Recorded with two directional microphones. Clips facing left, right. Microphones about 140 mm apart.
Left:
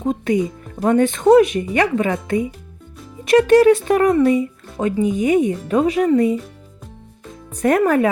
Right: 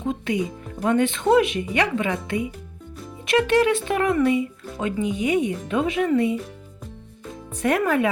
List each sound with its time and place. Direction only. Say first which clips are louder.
0.0 s speech: left 6 dB; 40° left (ahead or behind)
7.5 s speech: left 5 dB; 40° left (ahead or behind)